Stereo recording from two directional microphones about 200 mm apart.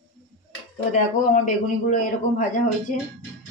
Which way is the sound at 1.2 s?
40° left (ahead or behind).